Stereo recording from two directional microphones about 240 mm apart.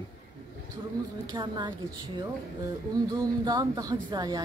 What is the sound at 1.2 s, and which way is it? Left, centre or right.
Speech, centre.